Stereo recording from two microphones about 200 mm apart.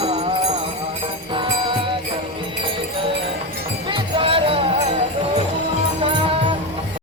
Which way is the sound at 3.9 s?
25° right (ahead or behind).